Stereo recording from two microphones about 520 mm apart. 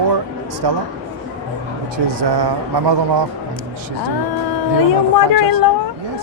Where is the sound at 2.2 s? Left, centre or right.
Right.